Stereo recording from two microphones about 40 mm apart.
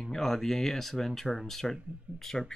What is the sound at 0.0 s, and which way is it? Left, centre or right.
Speech, centre.